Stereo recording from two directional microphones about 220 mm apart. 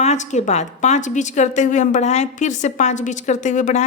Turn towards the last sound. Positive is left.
turn(degrees=35)  # may be behind; listen again after turning